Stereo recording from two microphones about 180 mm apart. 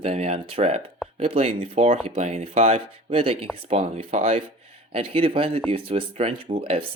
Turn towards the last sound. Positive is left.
turn(degrees=-30)  # may be behind; listen again after turning